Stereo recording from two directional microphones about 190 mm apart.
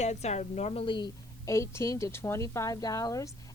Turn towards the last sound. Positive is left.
turn(degrees=15)  # may be behind; listen again after turning